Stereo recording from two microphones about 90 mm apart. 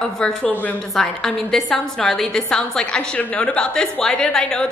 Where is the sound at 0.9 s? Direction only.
5° left (ahead or behind).